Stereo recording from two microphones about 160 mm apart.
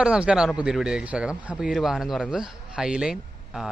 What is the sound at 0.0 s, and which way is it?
Speech, 5° right (ahead or behind).